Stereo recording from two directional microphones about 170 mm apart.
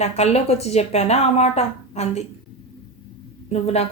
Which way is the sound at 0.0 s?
40° left (ahead or behind).